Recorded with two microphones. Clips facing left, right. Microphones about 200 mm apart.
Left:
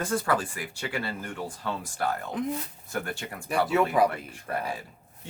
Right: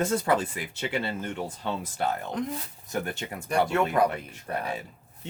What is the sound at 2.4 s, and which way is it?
Speech, 5° left (ahead or behind).